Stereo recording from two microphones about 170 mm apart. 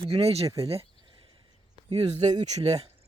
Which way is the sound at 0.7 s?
35° right (ahead or behind).